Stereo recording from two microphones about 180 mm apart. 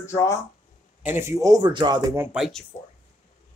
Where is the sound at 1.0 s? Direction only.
15° right (ahead or behind).